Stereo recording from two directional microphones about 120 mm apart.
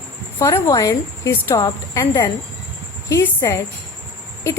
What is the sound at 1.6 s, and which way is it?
Speech, 40° left (ahead or behind).